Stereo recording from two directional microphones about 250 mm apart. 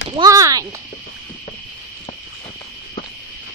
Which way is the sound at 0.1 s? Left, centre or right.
Centre.